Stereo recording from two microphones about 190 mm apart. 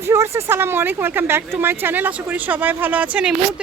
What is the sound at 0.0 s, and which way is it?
Speech, 15° right (ahead or behind).